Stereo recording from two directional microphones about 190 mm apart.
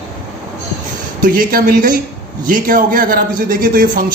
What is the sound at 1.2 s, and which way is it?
Speech, 50° right (ahead or behind).